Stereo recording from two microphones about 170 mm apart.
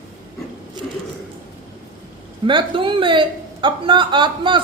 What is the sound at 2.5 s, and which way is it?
A woman's voice, 30° right (ahead or behind).